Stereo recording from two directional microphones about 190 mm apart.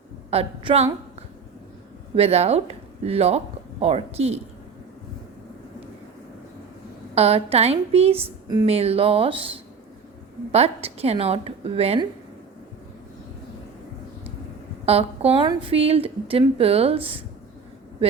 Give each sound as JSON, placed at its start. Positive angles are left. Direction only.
{"t": 0.3, "sound": "speech", "side_deg": -30}
{"t": 2.1, "sound": "speech", "side_deg": -35}
{"t": 7.2, "sound": "speech", "side_deg": -30}
{"t": 14.8, "sound": "speech", "side_deg": -30}